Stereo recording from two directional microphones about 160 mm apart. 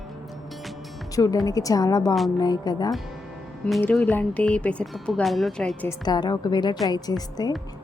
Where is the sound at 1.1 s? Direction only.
20° left (ahead or behind).